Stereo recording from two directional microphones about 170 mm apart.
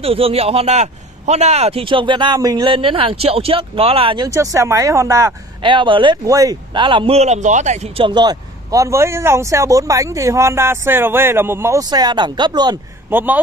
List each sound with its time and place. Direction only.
0.0 s a man's voice: 35° right (ahead or behind)
4.3 s speech: 20° right (ahead or behind); by 8.1 s 40° right (ahead or behind)
8.1 s speech: 25° right (ahead or behind)
13.1 s speech: 10° right (ahead or behind)